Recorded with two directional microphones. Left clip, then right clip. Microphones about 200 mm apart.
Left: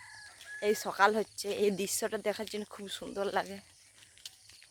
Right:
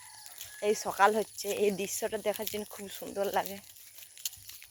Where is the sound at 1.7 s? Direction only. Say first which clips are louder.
Right 1 dB; 15° left (ahead or behind).